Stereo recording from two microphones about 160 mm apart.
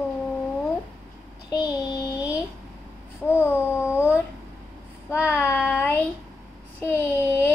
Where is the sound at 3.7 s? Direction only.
15° left (ahead or behind).